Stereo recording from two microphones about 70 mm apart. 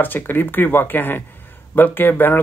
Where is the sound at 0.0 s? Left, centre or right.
Left.